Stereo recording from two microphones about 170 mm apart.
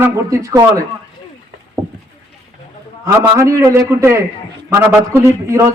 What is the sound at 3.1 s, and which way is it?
A man's voice, 15° right (ahead or behind).